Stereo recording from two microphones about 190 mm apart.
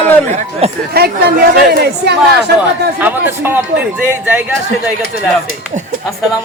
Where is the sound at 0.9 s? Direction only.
55° right (ahead or behind).